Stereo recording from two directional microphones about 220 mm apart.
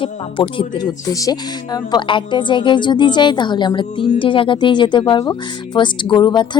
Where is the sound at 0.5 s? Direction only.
20° left (ahead or behind).